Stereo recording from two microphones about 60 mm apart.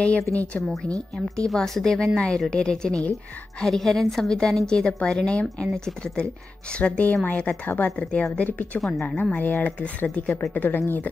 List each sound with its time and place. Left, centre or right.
0.3 s a woman's voice: left
1.4 s a woman's voice: centre
3.6 s a woman's voice: centre
7.6 s speech: left
7.9 s a woman's voice: centre